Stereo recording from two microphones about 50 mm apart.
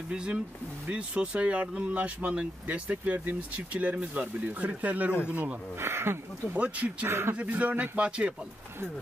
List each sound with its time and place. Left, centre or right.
0.1 s speech: right
5.8 s speech: right
6.5 s speech: right
7.1 s speech: right
7.3 s speech: right